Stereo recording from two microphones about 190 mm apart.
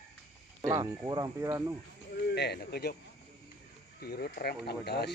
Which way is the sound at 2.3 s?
60° left (ahead or behind).